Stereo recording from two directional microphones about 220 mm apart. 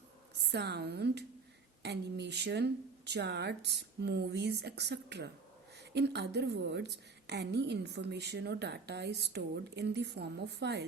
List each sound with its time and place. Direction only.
0.5 s a woman's voice: 50° right (ahead or behind)